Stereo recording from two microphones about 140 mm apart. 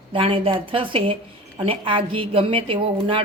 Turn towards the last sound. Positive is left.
turn(degrees=-40)  # may be behind; listen again after turning